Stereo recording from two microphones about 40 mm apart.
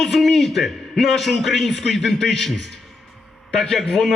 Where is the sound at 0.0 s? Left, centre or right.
Centre.